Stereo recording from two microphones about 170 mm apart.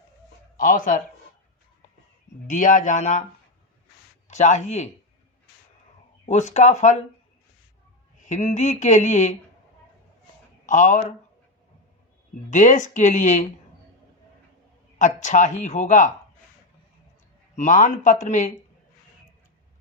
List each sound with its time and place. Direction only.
0.5 s speech: 50° left (ahead or behind)
2.5 s speech: 50° left (ahead or behind)
4.3 s speech: 45° left (ahead or behind)
6.2 s speech: 45° left (ahead or behind)
8.2 s speech: 45° left (ahead or behind)
10.7 s speech: 45° left (ahead or behind)
12.5 s speech: 45° left (ahead or behind)
14.9 s speech: 45° left (ahead or behind)
17.5 s speech: 45° left (ahead or behind)